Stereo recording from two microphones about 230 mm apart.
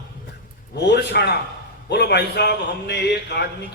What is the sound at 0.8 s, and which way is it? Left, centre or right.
A man's voice, left.